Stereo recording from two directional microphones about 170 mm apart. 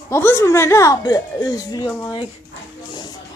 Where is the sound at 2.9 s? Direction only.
25° left (ahead or behind).